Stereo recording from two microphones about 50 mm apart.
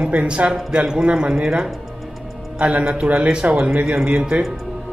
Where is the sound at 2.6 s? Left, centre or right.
Centre.